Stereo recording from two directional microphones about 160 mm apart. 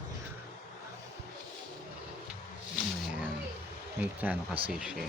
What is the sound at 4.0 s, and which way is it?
Speech, 10° right (ahead or behind).